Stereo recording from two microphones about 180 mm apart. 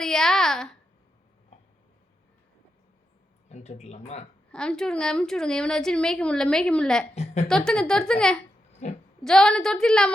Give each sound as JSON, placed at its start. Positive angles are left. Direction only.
{"t": 0.0, "sound": "a sound", "side_deg": 5}
{"t": 3.5, "sound": "speech", "side_deg": 40}
{"t": 4.5, "sound": "a woman's voice", "side_deg": 5}
{"t": 7.1, "sound": "a woman's voice", "side_deg": 40}
{"t": 7.4, "sound": "a woman's voice", "side_deg": 5}
{"t": 8.8, "sound": "speech", "side_deg": 40}
{"t": 9.2, "sound": "a woman's voice", "side_deg": 5}